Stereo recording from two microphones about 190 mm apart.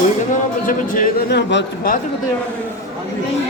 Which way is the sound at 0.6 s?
45° left (ahead or behind).